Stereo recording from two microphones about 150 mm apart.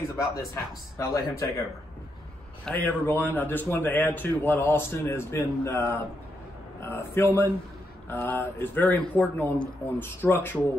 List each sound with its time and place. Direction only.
0.1 s a man's voice: 20° left (ahead or behind)